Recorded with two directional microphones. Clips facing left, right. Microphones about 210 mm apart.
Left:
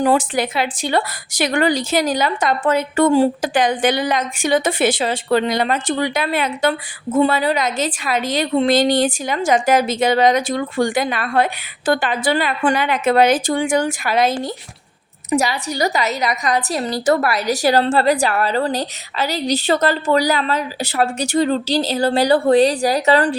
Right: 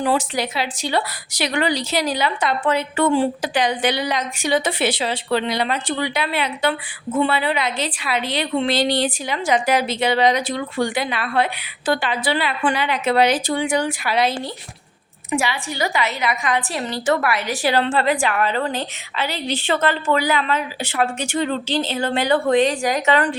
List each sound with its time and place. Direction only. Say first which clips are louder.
0.0 s a woman's voice: left 4 dB; 50° left (ahead or behind); by 23.3 s 35° left (ahead or behind)